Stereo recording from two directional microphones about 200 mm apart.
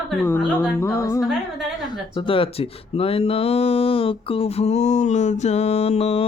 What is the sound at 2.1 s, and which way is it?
Speech, 25° left (ahead or behind).